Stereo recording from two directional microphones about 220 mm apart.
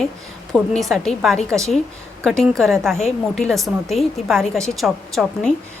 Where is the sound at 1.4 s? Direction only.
15° right (ahead or behind).